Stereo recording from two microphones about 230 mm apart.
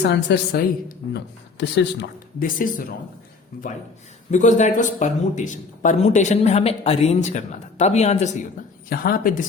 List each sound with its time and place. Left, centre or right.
0.0 s a woman's voice: left